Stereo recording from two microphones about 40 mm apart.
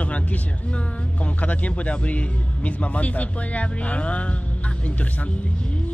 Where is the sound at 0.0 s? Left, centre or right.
Left.